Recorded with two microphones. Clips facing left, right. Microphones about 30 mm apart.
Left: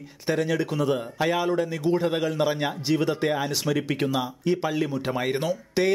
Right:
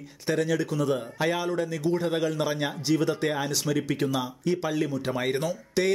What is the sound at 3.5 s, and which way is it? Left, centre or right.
A man's voice, left.